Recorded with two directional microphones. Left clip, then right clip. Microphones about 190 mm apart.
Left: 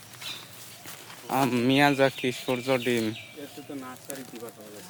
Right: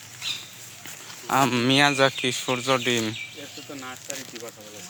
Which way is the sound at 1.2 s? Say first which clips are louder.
Right 4 dB; 5° left (ahead or behind).